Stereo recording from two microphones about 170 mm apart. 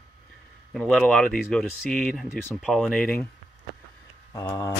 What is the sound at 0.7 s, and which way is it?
Speech, 5° left (ahead or behind).